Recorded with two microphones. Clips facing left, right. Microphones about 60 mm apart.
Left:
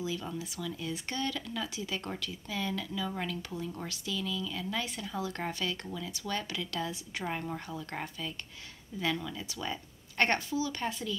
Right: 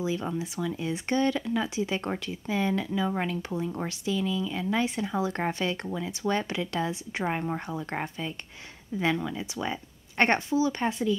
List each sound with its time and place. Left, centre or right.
0.0 s speech: right